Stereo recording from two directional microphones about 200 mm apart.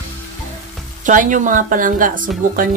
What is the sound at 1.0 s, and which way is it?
Speech, 40° right (ahead or behind).